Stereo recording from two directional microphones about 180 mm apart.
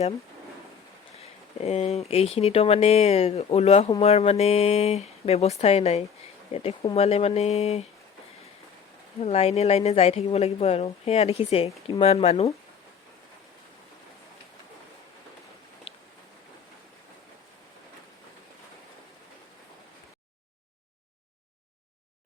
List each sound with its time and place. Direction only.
1.2 s a woman's voice: 35° left (ahead or behind)
9.2 s a woman's voice: 35° left (ahead or behind)
15.9 s a sound: 30° left (ahead or behind)